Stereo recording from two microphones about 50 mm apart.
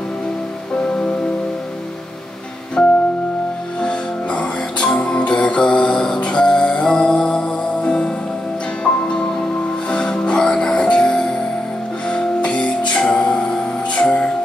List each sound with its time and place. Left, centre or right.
2.8 s music: centre